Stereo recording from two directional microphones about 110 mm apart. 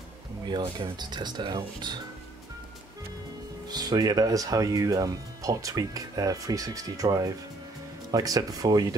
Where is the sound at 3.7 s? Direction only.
40° right (ahead or behind).